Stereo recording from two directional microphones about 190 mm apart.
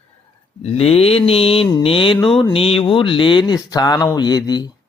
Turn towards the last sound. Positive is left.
turn(degrees=20)  # may be behind; listen again after turning